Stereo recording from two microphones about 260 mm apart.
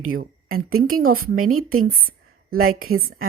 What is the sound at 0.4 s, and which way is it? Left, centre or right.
Speech, right.